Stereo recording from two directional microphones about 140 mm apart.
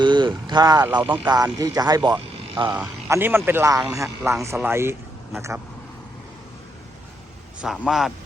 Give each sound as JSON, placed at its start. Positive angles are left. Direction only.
{"t": 0.0, "sound": "vehicle", "side_deg": -35}
{"t": 0.9, "sound": "speech", "side_deg": -35}
{"t": 2.7, "sound": "speech", "side_deg": -15}
{"t": 7.6, "sound": "a man's voice", "side_deg": 0}